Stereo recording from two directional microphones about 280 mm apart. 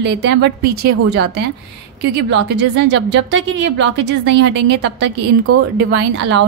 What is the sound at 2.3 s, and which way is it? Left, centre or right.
A woman's voice, right.